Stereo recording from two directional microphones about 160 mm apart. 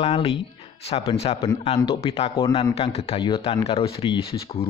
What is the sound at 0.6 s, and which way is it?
Music, 40° left (ahead or behind).